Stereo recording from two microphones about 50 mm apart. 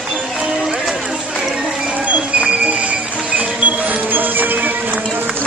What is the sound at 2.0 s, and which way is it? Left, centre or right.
Music, right.